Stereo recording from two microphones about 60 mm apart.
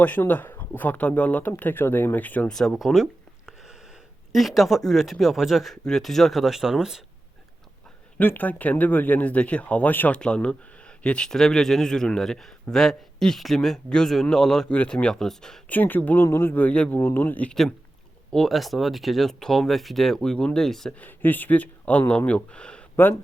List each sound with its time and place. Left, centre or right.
0.3 s speech: left
2.5 s speech: centre
2.7 s a sound: centre
4.3 s speech: centre
8.2 s speech: left
10.1 s speech: centre
15.7 s speech: left
16.2 s speech: left
16.6 s speech: left
17.5 s speech: centre
20.9 s speech: left